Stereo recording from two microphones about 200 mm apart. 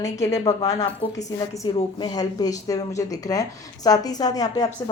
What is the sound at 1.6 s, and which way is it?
A woman's voice, 20° left (ahead or behind).